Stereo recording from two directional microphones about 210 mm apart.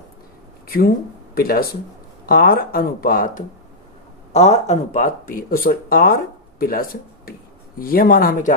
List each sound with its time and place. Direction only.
0.7 s speech: 45° left (ahead or behind)
4.3 s speech: 30° left (ahead or behind)